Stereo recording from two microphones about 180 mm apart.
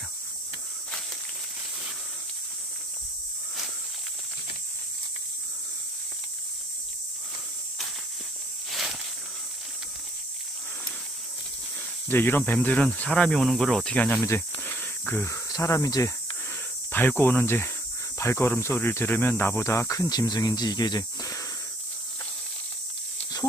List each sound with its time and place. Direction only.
8.6 s walk: centre (ahead or behind)
12.1 s speech: 10° left (ahead or behind)